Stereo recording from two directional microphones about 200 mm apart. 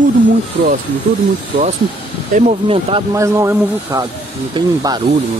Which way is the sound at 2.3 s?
35° right (ahead or behind).